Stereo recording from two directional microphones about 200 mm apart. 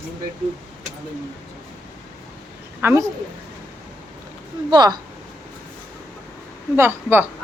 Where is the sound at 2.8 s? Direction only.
15° right (ahead or behind).